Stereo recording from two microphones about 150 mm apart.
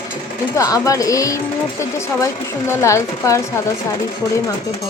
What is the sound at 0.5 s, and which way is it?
Speech, 25° left (ahead or behind).